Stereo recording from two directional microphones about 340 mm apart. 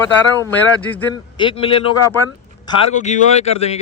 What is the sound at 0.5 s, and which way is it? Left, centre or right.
A man's voice, centre.